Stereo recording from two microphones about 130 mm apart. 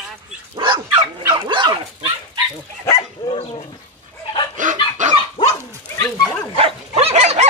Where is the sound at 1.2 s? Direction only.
35° right (ahead or behind).